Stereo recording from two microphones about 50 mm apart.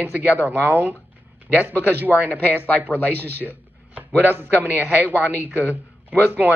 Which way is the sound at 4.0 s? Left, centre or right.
Right.